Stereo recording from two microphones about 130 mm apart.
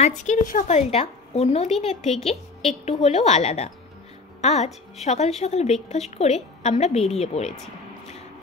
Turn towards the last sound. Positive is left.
turn(degrees=55)  # may be behind; listen again after turning